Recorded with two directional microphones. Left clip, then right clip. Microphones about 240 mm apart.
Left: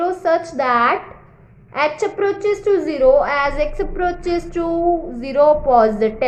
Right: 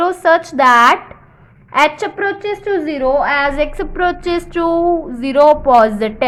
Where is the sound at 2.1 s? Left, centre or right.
Centre.